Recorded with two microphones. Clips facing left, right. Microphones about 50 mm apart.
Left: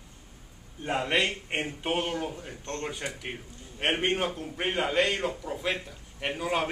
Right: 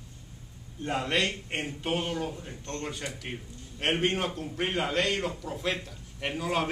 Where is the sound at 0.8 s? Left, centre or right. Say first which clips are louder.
Left 1 dB; centre.